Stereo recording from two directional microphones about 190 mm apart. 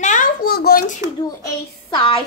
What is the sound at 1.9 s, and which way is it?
Speech, 25° left (ahead or behind).